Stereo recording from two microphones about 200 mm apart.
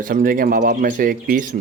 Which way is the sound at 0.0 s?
45° right (ahead or behind).